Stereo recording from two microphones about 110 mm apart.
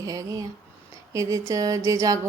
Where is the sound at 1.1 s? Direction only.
30° right (ahead or behind).